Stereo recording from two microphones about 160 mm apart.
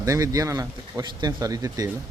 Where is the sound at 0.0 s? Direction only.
20° right (ahead or behind).